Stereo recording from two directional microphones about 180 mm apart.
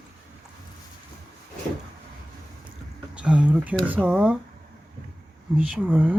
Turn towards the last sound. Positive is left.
turn(degrees=-10)  # may be behind; listen again after turning